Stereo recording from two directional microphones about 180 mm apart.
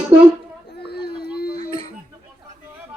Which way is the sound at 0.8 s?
65° left (ahead or behind).